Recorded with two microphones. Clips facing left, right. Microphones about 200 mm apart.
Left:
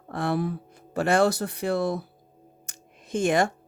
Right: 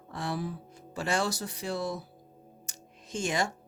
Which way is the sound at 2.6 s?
55° left (ahead or behind).